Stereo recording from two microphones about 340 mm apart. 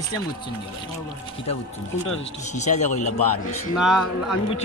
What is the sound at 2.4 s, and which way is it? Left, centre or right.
Speech, centre.